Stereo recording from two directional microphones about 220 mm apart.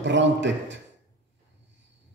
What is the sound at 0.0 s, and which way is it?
Speech, 55° right (ahead or behind).